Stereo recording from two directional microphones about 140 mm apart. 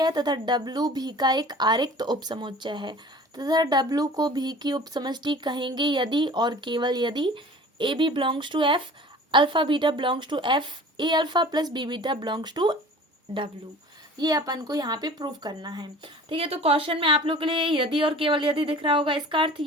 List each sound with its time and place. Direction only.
0.0 s speech: 30° right (ahead or behind)
14.2 s speech: 25° right (ahead or behind)
16.3 s speech: 40° right (ahead or behind)